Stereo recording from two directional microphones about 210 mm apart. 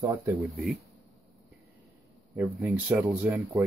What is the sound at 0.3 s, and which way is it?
Speech, 5° right (ahead or behind).